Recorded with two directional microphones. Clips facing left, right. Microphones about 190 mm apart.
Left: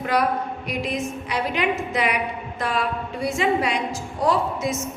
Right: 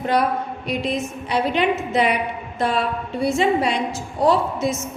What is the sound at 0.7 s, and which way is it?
A woman's voice, 25° right (ahead or behind).